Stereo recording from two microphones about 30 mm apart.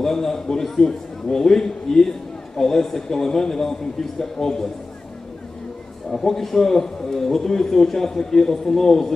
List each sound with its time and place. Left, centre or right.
0.0 s a man's voice: centre
6.0 s a man's voice: centre